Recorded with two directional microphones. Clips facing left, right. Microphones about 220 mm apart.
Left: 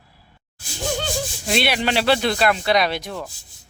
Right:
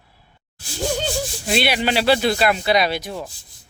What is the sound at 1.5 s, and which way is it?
Speech, centre (ahead or behind).